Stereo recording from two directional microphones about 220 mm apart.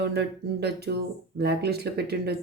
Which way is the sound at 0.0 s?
50° right (ahead or behind).